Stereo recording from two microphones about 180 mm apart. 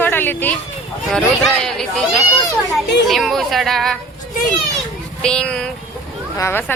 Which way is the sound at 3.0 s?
Centre (ahead or behind).